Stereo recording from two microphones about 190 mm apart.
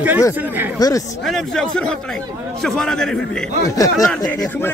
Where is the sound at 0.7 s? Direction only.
20° left (ahead or behind).